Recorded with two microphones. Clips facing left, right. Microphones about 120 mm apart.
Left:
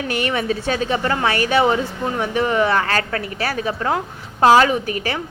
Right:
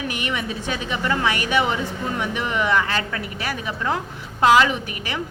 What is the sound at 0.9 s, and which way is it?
Speech, 40° left (ahead or behind).